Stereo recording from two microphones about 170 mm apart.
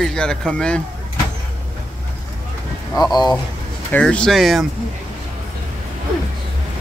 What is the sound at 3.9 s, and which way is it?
Speech, 5° left (ahead or behind).